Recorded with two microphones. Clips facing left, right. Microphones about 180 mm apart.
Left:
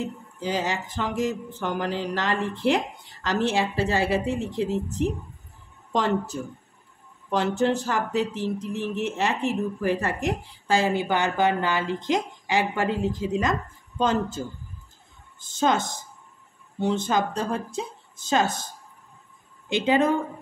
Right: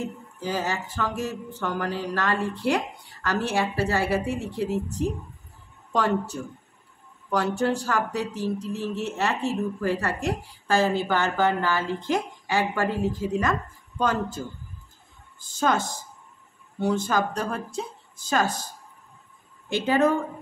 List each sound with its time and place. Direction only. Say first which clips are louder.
0.0 s speech: left 1 dB; 20° left (ahead or behind)
15.4 s speech: left 1 dB; 20° left (ahead or behind)
19.7 s speech: even; 15° left (ahead or behind)